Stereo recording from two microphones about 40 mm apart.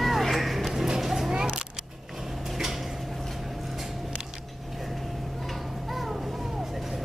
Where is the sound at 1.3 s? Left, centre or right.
Centre.